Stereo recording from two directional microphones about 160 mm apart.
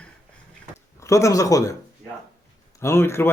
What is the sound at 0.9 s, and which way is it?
Speech, 20° left (ahead or behind).